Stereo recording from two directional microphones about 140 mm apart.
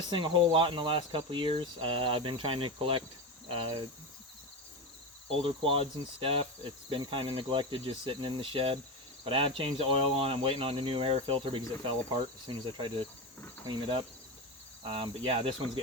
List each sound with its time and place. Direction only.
0.1 s cricket: 35° right (ahead or behind)
5.3 s cricket: 40° right (ahead or behind)